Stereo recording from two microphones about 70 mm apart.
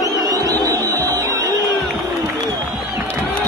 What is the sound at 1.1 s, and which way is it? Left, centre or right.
Music, right.